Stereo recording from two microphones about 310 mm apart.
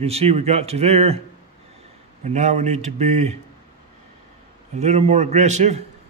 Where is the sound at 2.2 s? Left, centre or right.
Right.